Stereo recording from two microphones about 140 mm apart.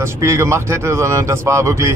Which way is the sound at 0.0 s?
20° right (ahead or behind).